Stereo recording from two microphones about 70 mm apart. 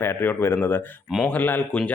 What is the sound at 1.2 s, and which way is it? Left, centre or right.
Speech, left.